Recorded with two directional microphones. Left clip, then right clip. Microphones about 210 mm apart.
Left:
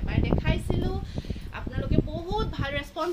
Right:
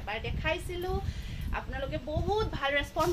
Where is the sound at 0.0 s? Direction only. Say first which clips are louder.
Left 3 dB; 10° left (ahead or behind).